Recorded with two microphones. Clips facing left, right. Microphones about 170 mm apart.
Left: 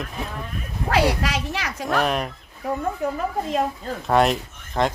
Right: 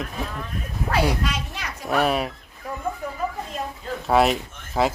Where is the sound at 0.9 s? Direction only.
90° left.